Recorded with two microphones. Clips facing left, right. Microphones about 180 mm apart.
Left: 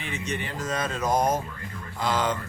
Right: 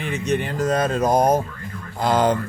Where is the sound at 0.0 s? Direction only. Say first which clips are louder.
Right 9 dB; 60° right (ahead or behind).